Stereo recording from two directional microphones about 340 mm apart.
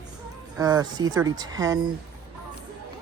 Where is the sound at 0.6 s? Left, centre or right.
Centre.